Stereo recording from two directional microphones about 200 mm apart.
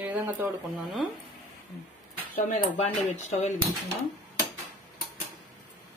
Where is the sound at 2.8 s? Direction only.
35° left (ahead or behind).